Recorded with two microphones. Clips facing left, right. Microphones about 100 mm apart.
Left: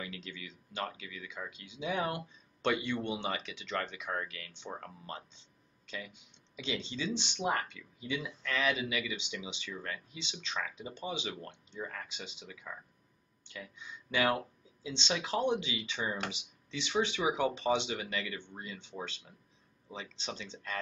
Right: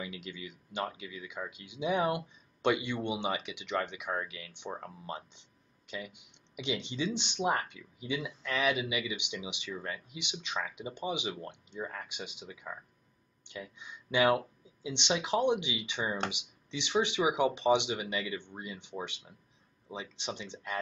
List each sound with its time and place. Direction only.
0.0 s speech: 20° right (ahead or behind)